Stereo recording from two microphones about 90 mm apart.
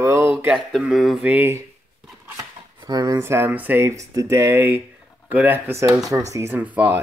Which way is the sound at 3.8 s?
35° right (ahead or behind).